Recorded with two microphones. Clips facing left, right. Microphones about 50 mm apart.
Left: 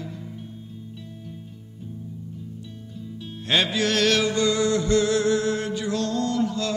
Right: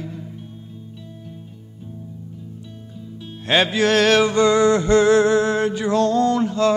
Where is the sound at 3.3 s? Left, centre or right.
Right.